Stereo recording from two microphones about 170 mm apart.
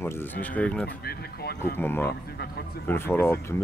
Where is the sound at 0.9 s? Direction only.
70° left (ahead or behind).